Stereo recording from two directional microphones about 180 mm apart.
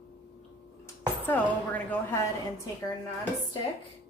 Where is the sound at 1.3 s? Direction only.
10° left (ahead or behind).